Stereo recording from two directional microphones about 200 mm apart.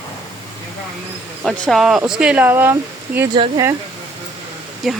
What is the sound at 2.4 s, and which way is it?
Speech, 15° right (ahead or behind).